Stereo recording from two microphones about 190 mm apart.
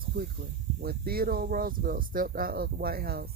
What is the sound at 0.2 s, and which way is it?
Speech, 55° right (ahead or behind).